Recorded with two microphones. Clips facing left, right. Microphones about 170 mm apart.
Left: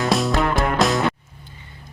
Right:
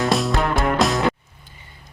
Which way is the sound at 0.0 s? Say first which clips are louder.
Even; centre (ahead or behind).